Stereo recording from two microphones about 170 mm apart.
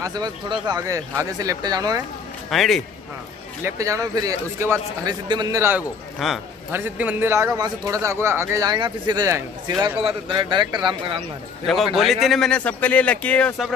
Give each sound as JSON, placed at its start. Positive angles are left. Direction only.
{"t": 0.0, "sound": "a man's voice", "side_deg": -25}
{"t": 2.5, "sound": "speech", "side_deg": 0}
{"t": 3.6, "sound": "a man's voice", "side_deg": -20}
{"t": 6.1, "sound": "speech", "side_deg": 0}
{"t": 6.7, "sound": "a man's voice", "side_deg": -10}
{"t": 11.6, "sound": "speech", "side_deg": 0}